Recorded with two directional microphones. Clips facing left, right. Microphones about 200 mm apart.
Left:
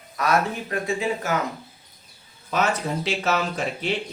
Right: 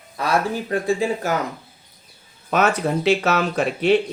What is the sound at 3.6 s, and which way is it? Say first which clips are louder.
Speech: right 6 dB; 65° right (ahead or behind).